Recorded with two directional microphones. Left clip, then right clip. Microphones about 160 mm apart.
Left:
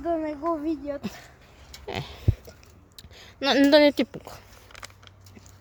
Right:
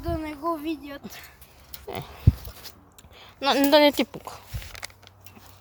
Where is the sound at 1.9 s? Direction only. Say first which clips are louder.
Right 1 dB; 15° left (ahead or behind).